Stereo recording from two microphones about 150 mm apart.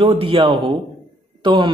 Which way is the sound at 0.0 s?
35° right (ahead or behind).